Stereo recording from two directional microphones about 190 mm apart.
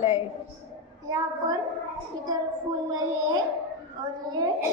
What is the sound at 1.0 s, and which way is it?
Speech, 20° right (ahead or behind).